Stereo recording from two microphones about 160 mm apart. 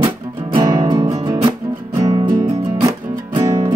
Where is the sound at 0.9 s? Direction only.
20° right (ahead or behind).